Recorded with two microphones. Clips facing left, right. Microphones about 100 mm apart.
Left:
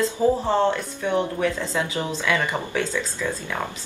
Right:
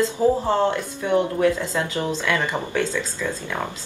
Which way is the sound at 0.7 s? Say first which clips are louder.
Right 2 dB; 15° right (ahead or behind).